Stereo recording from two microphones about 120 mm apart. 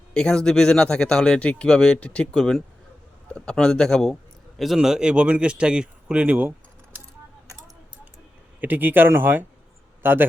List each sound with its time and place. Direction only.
0.1 s a man's voice: 5° left (ahead or behind); by 6.5 s 10° right (ahead or behind)
8.6 s a man's voice: 15° right (ahead or behind)